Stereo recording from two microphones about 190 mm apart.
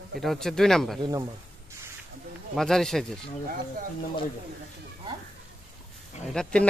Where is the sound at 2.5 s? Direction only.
Centre (ahead or behind).